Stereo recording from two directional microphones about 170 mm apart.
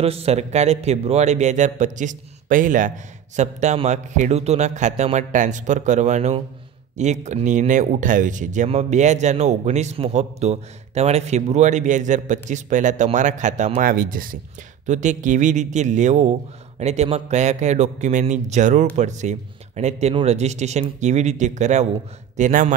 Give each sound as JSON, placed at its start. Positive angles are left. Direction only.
{"t": 0.0, "sound": "speech", "side_deg": -35}